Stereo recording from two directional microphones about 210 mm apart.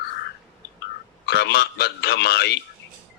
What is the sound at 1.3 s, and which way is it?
A man's voice, 50° left (ahead or behind).